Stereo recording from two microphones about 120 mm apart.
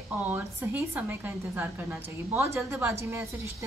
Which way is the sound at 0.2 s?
15° right (ahead or behind).